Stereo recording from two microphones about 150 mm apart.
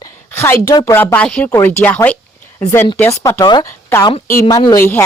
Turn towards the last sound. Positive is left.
turn(degrees=15)  # may be behind; listen again after turning